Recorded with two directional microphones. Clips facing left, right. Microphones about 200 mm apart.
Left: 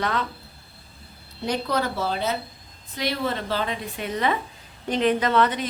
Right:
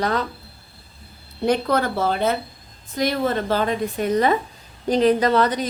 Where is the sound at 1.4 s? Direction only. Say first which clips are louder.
Right 5 dB; 55° right (ahead or behind).